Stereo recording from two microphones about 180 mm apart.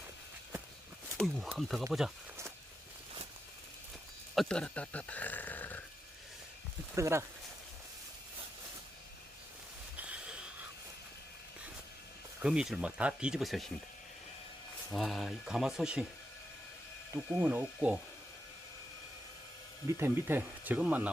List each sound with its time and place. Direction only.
1.1 s speech: centre (ahead or behind)
4.4 s speech: 5° left (ahead or behind)
6.9 s speech: 15° right (ahead or behind)
10.0 s a sound: 5° right (ahead or behind)
12.4 s speech: 5° right (ahead or behind)
14.8 s speech: centre (ahead or behind)
17.4 s speech: 10° right (ahead or behind)
20.0 s speech: 10° right (ahead or behind)